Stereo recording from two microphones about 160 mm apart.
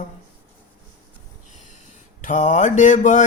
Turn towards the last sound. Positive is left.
turn(degrees=50)  # may be behind; listen again after turning